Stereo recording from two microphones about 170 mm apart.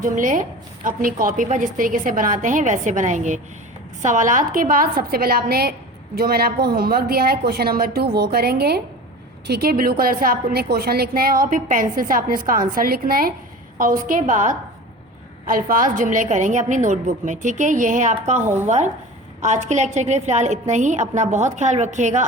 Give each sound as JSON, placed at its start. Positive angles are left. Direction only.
{"t": 0.0, "sound": "a woman's voice", "side_deg": -50}